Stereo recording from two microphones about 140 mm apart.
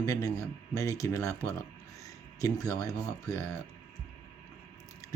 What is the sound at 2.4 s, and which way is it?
Speech, 25° left (ahead or behind).